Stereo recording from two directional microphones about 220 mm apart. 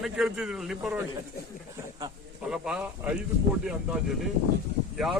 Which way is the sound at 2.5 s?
5° right (ahead or behind).